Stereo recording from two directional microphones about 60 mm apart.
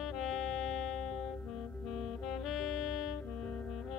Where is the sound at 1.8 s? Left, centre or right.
Centre.